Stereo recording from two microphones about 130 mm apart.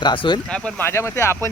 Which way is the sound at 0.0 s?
35° left (ahead or behind).